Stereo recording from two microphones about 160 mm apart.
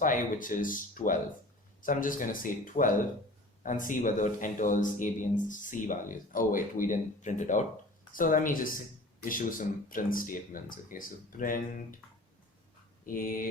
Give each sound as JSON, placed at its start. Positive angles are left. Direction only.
{"t": 0.0, "sound": "speech", "side_deg": 55}
{"t": 13.1, "sound": "speech", "side_deg": 60}